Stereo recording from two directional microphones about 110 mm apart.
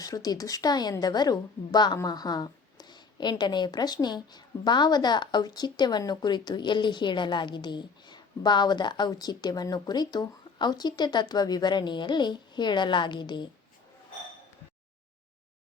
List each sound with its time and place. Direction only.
0.0 s a woman's voice: 35° left (ahead or behind)